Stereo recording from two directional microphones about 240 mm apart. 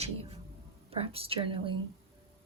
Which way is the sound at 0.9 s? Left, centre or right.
Right.